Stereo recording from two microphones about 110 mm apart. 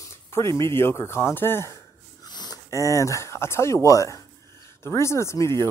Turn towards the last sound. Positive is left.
turn(degrees=25)  # may be behind; listen again after turning